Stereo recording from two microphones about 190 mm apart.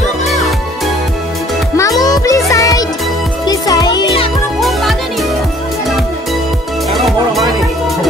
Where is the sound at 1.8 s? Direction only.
20° left (ahead or behind).